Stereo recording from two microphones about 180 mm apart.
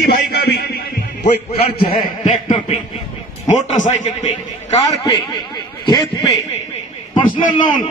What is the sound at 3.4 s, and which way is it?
Speech, 40° left (ahead or behind).